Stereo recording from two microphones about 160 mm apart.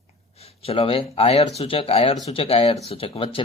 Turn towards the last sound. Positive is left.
turn(degrees=35)  # may be behind; listen again after turning